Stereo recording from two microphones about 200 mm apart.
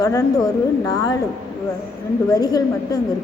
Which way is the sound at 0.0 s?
15° left (ahead or behind).